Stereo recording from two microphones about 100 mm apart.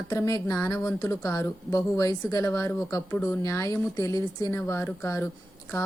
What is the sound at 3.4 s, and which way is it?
Speech, 30° left (ahead or behind).